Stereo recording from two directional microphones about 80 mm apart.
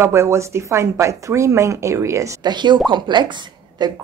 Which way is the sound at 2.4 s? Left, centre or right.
Right.